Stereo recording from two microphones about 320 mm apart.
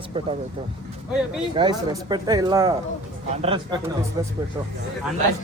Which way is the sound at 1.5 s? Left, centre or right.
Centre.